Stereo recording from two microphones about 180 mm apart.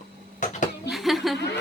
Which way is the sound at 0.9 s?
Centre (ahead or behind).